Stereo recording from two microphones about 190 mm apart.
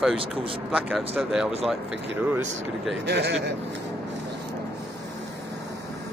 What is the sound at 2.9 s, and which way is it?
Speech, 65° right (ahead or behind).